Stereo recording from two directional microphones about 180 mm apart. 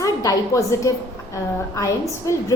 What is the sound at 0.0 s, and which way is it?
A woman's voice, 20° left (ahead or behind).